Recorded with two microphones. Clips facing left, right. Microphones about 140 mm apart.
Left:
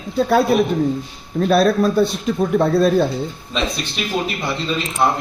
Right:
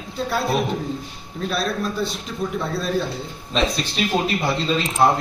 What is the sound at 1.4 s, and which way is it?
Speech, 50° left (ahead or behind).